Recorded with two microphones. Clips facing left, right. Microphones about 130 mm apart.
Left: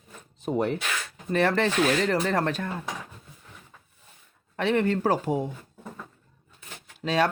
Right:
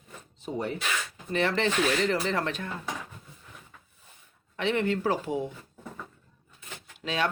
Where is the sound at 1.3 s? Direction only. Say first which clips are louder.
Left 3 dB; 45° left (ahead or behind).